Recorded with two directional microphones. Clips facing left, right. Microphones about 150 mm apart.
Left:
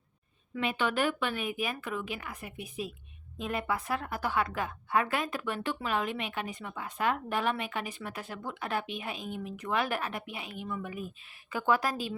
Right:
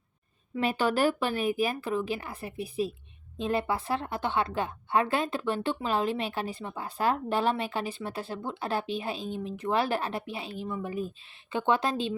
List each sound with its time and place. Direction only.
0.5 s a woman's voice: 40° right (ahead or behind)